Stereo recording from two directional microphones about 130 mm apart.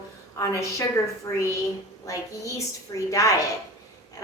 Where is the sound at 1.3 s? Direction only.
25° left (ahead or behind).